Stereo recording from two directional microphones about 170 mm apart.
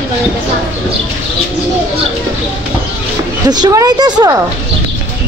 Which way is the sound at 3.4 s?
25° right (ahead or behind).